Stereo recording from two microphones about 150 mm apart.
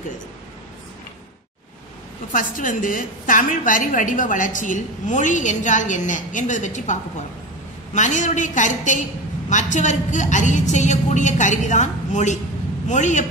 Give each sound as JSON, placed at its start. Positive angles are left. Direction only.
{"t": 2.3, "sound": "a woman's voice", "side_deg": 65}